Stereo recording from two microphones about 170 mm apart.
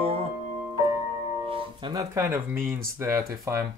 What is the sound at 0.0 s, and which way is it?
Music, 35° right (ahead or behind).